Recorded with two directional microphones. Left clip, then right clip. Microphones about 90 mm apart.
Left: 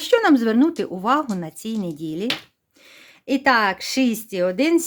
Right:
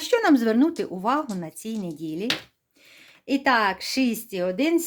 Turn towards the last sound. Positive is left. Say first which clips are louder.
# left 4 dB
turn(degrees=40)  # may be behind; listen again after turning